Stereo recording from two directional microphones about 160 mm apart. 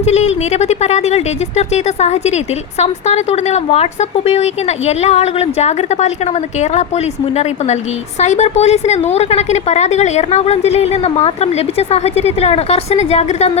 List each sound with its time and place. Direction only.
0.0 s a woman's voice: 45° left (ahead or behind)